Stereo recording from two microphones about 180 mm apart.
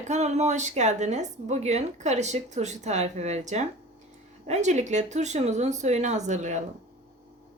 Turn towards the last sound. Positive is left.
turn(degrees=-40)  # may be behind; listen again after turning